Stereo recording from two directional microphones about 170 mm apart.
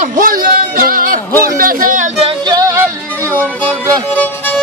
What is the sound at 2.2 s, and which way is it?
Music, 35° right (ahead or behind).